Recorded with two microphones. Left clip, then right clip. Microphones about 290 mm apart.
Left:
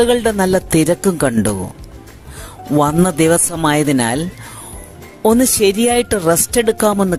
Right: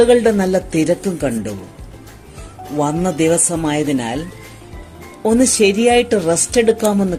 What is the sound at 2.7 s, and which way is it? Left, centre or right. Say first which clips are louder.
Speech: left 4 dB; left.